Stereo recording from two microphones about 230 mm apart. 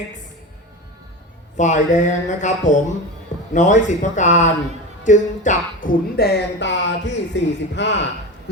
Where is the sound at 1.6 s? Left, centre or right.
Left.